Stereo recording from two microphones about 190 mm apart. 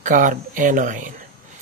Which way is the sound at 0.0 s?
40° right (ahead or behind).